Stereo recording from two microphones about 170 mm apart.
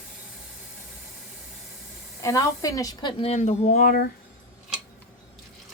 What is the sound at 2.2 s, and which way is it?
Speech, 20° left (ahead or behind).